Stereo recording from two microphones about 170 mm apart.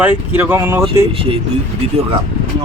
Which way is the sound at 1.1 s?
30° right (ahead or behind).